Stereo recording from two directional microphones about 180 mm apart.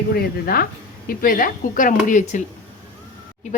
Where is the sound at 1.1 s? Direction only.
50° left (ahead or behind).